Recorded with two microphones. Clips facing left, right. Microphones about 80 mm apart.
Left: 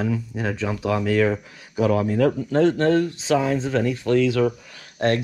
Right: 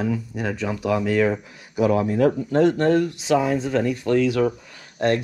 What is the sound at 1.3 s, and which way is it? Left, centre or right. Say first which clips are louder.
Speech: even; right.